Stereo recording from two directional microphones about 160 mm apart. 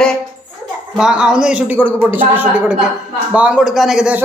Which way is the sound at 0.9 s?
5° right (ahead or behind).